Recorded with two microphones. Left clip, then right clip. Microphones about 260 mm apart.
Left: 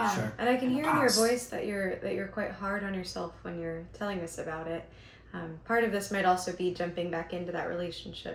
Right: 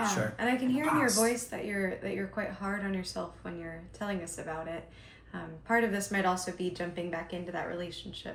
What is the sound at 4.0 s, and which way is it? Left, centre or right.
Speech, centre.